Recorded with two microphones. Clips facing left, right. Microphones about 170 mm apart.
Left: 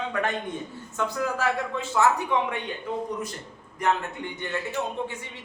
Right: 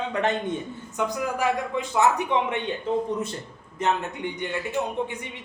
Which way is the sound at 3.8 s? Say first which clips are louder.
Right 1 dB; 20° right (ahead or behind).